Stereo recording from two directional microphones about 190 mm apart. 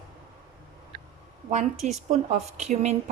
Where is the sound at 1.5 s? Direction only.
35° right (ahead or behind).